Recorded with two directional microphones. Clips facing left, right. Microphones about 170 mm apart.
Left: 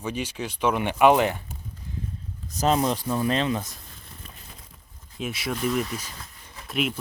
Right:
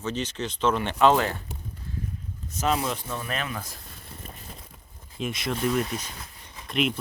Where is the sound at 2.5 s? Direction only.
35° left (ahead or behind).